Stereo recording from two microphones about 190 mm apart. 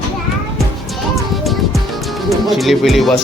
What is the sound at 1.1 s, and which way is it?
Music, centre (ahead or behind).